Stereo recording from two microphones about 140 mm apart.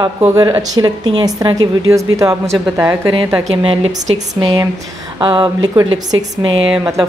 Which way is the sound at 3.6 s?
40° right (ahead or behind).